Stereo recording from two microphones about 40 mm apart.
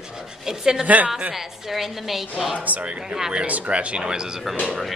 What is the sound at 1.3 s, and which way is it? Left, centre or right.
A woman's voice, centre.